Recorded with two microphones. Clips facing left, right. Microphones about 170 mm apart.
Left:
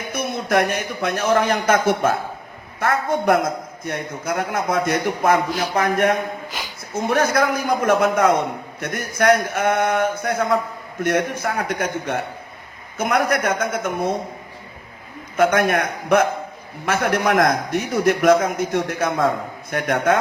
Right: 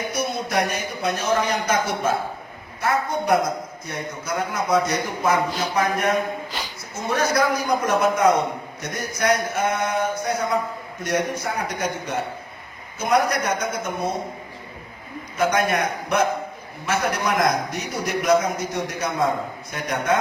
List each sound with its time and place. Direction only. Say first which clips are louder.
0.1 s a man's voice: left 8 dB; 55° left (ahead or behind)
15.4 s a man's voice: left 4 dB; 55° left (ahead or behind)